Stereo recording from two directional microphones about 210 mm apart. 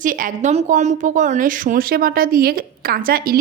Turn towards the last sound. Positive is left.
turn(degrees=-45)  # may be behind; listen again after turning